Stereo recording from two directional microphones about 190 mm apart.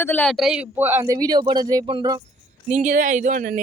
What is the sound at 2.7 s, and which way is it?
Speech, 40° right (ahead or behind).